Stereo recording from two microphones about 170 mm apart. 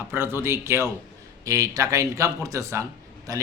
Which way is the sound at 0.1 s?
15° right (ahead or behind).